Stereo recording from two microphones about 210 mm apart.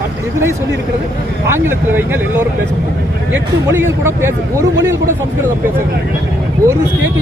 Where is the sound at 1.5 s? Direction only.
10° right (ahead or behind).